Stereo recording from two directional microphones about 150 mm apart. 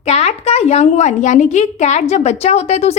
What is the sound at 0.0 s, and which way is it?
A woman's voice, 45° left (ahead or behind).